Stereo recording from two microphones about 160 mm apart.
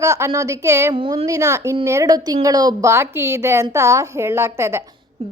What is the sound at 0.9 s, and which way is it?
Speech, 35° right (ahead or behind).